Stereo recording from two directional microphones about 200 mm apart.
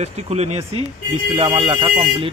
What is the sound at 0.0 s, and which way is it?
A man's voice, 35° right (ahead or behind).